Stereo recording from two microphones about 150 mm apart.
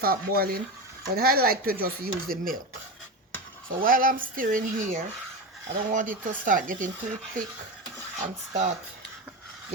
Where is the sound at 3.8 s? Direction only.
70° right (ahead or behind).